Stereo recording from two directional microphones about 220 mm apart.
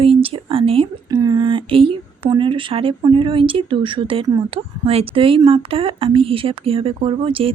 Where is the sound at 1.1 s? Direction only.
20° right (ahead or behind).